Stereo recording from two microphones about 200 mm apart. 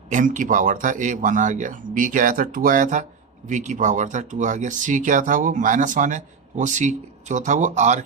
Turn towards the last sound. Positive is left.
turn(degrees=-35)  # may be behind; listen again after turning